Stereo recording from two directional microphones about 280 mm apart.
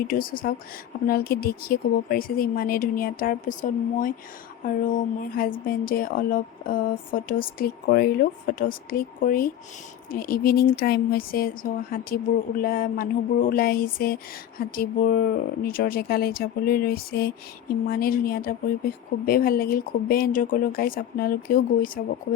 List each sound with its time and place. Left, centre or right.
0.1 s a woman's voice: left